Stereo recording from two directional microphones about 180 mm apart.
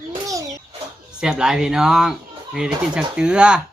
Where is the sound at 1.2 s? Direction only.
5° right (ahead or behind).